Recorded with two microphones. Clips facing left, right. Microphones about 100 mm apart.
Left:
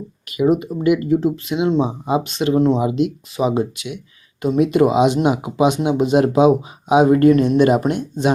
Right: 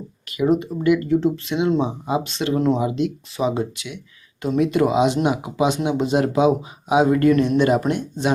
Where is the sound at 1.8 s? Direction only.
20° left (ahead or behind).